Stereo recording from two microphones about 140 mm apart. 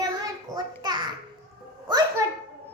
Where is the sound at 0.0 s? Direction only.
25° right (ahead or behind).